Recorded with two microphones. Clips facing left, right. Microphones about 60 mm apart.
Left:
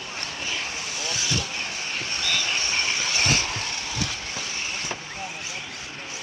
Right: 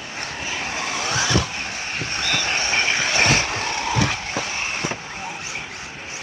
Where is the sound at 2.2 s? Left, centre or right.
Right.